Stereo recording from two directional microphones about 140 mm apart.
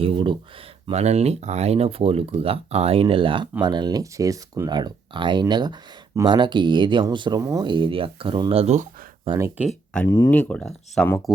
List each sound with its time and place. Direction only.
0.0 s speech: 40° right (ahead or behind)
0.9 s speech: 50° right (ahead or behind)
9.6 s speech: 10° right (ahead or behind)
10.1 s speech: 25° left (ahead or behind)
10.3 s speech: 5° left (ahead or behind)